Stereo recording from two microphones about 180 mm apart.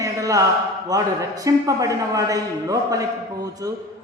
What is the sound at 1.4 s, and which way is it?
A man's voice, 20° right (ahead or behind).